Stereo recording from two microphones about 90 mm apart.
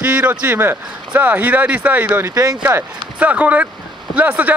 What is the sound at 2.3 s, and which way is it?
Speech, 45° right (ahead or behind).